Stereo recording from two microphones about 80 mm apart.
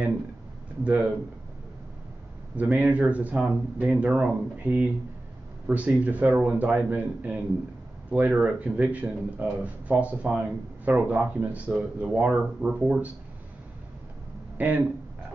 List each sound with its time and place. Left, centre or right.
0.8 s speech: right
2.5 s speech: centre
14.6 s speech: right